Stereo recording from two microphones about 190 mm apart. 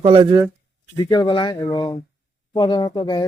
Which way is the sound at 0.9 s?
20° left (ahead or behind).